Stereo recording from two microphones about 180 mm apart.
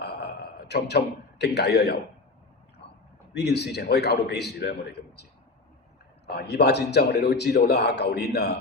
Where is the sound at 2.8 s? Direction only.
70° left (ahead or behind).